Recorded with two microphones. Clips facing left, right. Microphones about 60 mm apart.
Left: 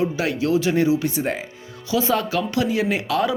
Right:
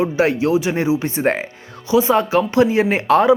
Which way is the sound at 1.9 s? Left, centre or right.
Right.